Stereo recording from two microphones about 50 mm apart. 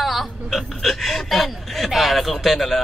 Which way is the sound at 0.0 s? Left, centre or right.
Centre.